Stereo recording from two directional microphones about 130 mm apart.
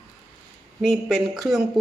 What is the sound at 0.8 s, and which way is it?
Speech, 5° right (ahead or behind).